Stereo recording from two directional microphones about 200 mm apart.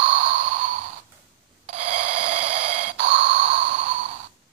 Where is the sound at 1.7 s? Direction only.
40° right (ahead or behind).